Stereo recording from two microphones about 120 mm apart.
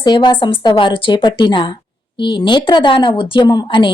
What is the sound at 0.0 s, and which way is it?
Speech, 40° left (ahead or behind).